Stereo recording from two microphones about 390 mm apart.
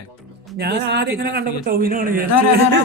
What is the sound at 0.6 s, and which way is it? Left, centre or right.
Speech, right.